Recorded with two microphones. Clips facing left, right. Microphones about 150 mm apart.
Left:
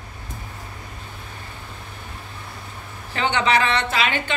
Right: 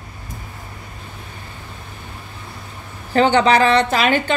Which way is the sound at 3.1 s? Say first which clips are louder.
Right 7 dB; 40° right (ahead or behind).